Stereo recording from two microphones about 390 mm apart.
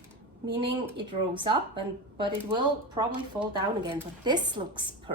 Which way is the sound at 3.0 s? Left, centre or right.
Centre.